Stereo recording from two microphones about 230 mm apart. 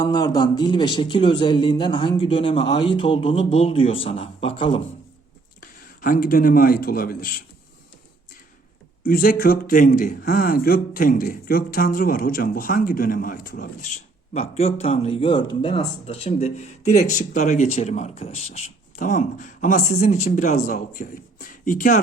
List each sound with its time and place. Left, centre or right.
0.0 s a man's voice: centre
5.5 s a man's voice: left
9.0 s speech: left
14.3 s a man's voice: left